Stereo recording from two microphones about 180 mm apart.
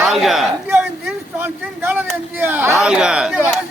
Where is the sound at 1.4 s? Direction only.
10° right (ahead or behind).